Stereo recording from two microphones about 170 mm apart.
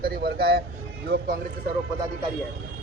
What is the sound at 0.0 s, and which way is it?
Music, 70° right (ahead or behind).